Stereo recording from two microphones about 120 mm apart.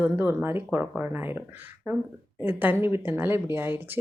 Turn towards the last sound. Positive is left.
turn(degrees=-15)  # may be behind; listen again after turning